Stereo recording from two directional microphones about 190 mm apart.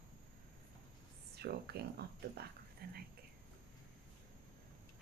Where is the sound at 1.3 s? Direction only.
55° right (ahead or behind).